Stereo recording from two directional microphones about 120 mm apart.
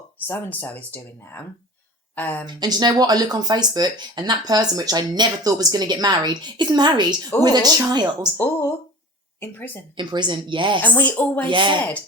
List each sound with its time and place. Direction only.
0.3 s speech: 15° left (ahead or behind)
2.5 s speech: 35° right (ahead or behind)
9.4 s speech: 15° left (ahead or behind)
10.0 s a woman's voice: 40° right (ahead or behind)
10.8 s speech: 15° left (ahead or behind)
11.3 s a woman's voice: 40° right (ahead or behind)
11.8 s speech: 15° left (ahead or behind)